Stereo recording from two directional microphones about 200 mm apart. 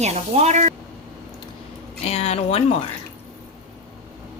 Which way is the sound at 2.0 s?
30° left (ahead or behind).